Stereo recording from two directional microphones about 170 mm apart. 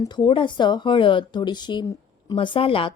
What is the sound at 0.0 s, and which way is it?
A woman's voice, 25° left (ahead or behind).